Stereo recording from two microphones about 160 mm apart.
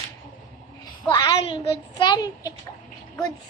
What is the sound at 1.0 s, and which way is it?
A child's voice, 25° left (ahead or behind).